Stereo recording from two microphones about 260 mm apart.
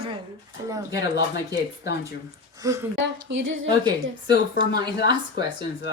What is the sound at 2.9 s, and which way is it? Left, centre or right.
Speech, right.